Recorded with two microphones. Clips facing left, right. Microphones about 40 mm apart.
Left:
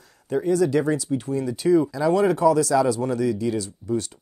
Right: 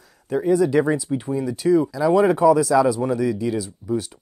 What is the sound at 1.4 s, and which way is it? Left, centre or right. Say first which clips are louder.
Speech: right 1 dB; centre.